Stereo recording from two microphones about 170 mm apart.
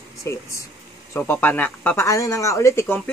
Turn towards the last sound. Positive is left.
turn(degrees=15)  # may be behind; listen again after turning